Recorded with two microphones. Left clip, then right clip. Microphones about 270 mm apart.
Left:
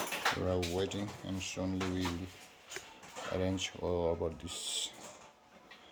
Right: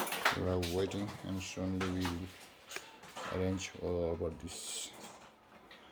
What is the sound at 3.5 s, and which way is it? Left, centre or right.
Speech, centre.